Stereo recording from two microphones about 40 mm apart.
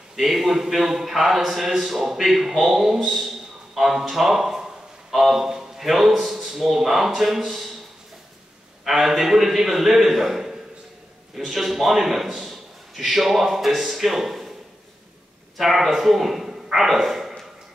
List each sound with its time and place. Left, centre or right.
0.1 s a man's voice: centre
8.8 s a man's voice: centre
15.5 s a man's voice: centre